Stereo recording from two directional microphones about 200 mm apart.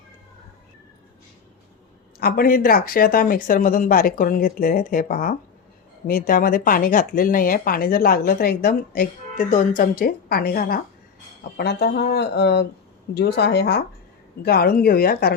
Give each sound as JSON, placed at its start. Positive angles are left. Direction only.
{"t": 2.1, "sound": "speech", "side_deg": 50}